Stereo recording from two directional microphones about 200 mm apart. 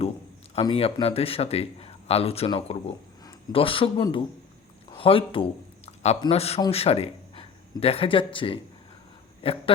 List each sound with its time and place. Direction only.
0.5 s a man's voice: 30° left (ahead or behind)